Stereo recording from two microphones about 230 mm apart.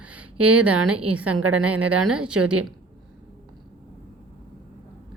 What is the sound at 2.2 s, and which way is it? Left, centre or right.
Speech, right.